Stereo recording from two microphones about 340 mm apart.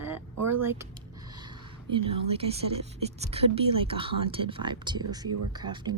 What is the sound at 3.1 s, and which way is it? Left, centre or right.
A woman's voice, centre.